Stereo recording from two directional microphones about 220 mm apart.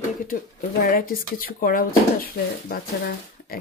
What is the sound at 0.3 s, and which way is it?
Speech, 40° left (ahead or behind).